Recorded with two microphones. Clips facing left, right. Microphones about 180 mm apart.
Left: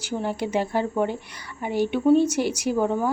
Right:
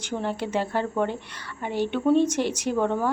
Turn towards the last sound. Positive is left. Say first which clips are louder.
# left 1 dB
turn(degrees=5)  # may be behind; listen again after turning